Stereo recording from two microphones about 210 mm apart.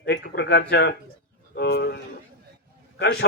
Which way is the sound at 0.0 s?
55° left (ahead or behind).